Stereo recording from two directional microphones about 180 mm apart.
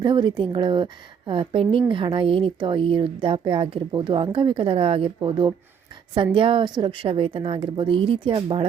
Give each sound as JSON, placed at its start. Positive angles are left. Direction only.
{"t": 0.0, "sound": "a woman's voice", "side_deg": -25}